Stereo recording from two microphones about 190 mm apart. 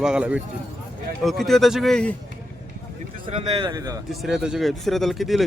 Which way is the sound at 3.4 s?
20° right (ahead or behind).